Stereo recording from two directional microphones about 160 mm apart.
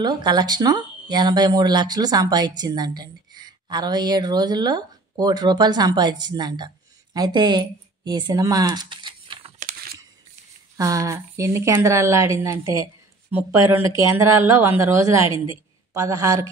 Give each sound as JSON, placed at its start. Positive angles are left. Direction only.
{"t": 0.0, "sound": "a woman's voice", "side_deg": -25}
{"t": 9.6, "sound": "a sound", "side_deg": -60}
{"t": 10.8, "sound": "speech", "side_deg": -20}